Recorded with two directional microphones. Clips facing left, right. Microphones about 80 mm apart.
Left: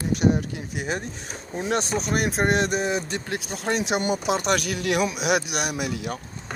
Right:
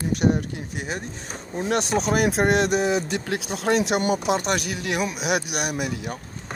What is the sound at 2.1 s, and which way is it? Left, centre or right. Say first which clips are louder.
Speech: right 2 dB; right.